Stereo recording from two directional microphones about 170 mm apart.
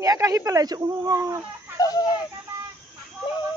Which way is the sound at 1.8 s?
20° left (ahead or behind).